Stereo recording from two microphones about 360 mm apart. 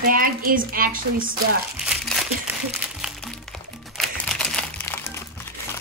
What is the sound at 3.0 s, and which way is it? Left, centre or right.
Music, centre.